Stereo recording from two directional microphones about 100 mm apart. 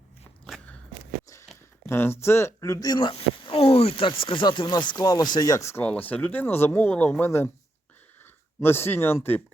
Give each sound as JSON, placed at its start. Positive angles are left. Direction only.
{"t": 1.9, "sound": "speech", "side_deg": 25}
{"t": 3.1, "sound": "speech", "side_deg": 70}
{"t": 5.8, "sound": "speech", "side_deg": 15}
{"t": 8.6, "sound": "speech", "side_deg": 20}